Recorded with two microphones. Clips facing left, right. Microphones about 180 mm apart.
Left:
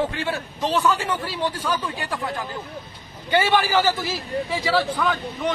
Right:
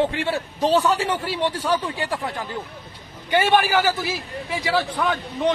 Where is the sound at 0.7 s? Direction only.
35° right (ahead or behind).